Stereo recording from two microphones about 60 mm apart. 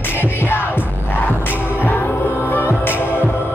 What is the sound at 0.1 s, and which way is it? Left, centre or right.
Music, left.